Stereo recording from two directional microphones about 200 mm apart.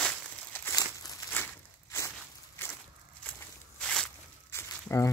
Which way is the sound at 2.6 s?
10° left (ahead or behind).